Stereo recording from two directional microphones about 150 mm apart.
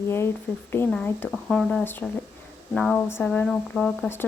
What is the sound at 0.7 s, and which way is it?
Speech, 10° left (ahead or behind).